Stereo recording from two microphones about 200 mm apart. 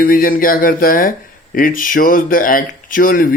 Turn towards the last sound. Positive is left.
turn(degrees=45)  # may be behind; listen again after turning